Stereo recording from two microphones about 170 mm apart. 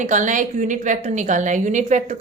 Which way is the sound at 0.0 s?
45° right (ahead or behind).